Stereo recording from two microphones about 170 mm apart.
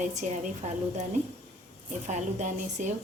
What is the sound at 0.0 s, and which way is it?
A woman's voice, 45° right (ahead or behind).